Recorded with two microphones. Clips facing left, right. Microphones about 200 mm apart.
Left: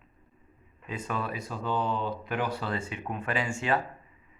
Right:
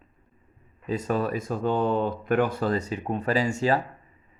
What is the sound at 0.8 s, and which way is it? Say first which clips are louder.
Speech: right 8 dB; 40° right (ahead or behind).